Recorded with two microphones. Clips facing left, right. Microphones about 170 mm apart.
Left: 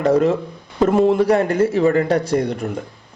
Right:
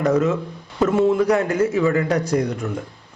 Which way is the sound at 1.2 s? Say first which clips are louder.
Left 2 dB; 30° left (ahead or behind).